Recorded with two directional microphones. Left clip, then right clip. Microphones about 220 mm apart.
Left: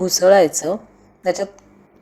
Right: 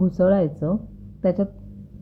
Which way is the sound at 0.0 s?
20° left (ahead or behind).